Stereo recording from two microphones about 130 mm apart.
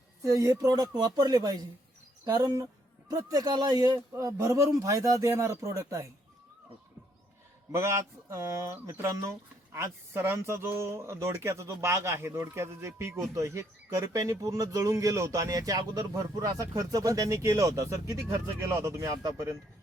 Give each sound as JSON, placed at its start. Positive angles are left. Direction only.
{"t": 0.2, "sound": "speech", "side_deg": -25}
{"t": 8.3, "sound": "speech", "side_deg": -25}